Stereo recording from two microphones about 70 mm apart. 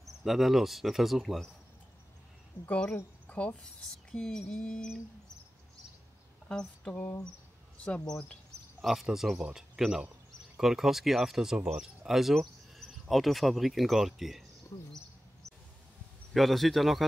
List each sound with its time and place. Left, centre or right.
0.0 s speech: centre
2.6 s speech: centre
3.3 s a sound: centre
4.1 s music: centre
6.5 s music: centre
7.7 s cricket: centre
8.1 s music: centre
9.0 s speech: centre
16.3 s speech: centre